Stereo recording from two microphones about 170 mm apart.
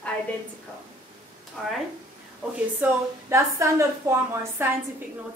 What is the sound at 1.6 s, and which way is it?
Speech, centre (ahead or behind).